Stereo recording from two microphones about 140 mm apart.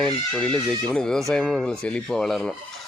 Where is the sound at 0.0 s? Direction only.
5° left (ahead or behind).